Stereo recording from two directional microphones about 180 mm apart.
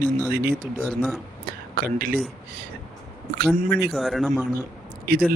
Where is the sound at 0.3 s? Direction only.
55° right (ahead or behind).